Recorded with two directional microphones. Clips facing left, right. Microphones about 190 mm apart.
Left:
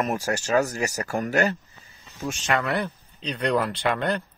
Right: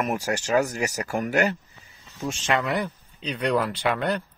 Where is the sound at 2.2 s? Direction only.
25° right (ahead or behind); by 4.2 s 5° right (ahead or behind).